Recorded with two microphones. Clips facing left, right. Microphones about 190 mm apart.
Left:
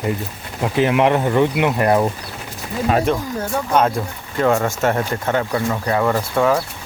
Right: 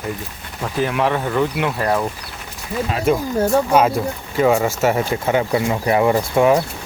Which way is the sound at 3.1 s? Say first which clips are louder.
Right 4 dB; 5° right (ahead or behind).